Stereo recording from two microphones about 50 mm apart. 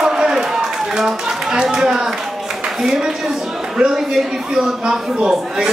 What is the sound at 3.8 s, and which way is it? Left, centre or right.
Speech, centre.